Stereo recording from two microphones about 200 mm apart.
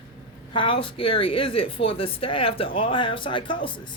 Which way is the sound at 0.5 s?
25° left (ahead or behind).